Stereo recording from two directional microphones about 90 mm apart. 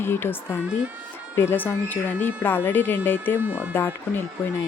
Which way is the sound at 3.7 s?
25° left (ahead or behind).